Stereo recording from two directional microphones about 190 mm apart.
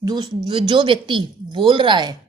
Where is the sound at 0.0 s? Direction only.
20° right (ahead or behind).